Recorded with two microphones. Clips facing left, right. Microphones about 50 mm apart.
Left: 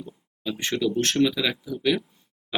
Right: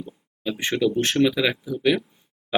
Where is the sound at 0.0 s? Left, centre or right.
Right.